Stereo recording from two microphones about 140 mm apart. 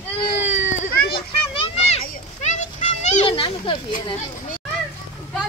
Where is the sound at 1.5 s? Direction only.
45° left (ahead or behind).